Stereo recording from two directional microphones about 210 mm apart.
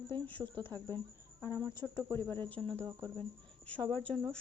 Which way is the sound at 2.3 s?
25° right (ahead or behind).